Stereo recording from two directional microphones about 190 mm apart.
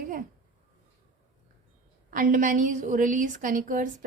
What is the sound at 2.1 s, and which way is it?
A woman's voice, 45° right (ahead or behind).